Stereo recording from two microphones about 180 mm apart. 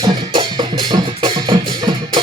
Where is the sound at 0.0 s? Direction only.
25° right (ahead or behind).